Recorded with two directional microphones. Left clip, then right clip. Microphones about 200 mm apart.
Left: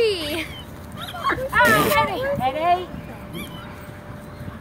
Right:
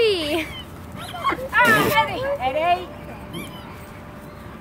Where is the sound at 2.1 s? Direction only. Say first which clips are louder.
Even; 20° right (ahead or behind).